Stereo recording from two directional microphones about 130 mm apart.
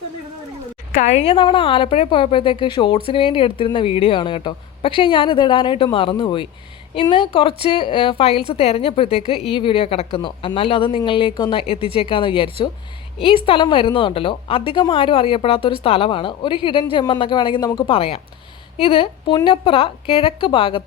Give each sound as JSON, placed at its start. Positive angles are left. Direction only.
{"t": 0.9, "sound": "speech", "side_deg": 60}
{"t": 1.4, "sound": "a woman's voice", "side_deg": 40}